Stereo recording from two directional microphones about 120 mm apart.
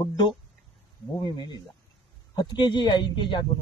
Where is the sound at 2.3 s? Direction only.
40° left (ahead or behind).